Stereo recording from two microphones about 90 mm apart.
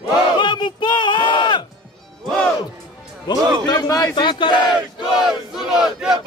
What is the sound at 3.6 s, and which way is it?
Speech, 50° left (ahead or behind).